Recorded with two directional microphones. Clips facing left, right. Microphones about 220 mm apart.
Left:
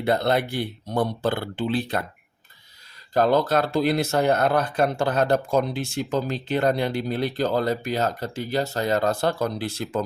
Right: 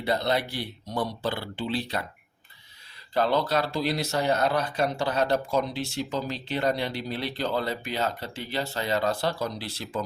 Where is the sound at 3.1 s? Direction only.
45° left (ahead or behind).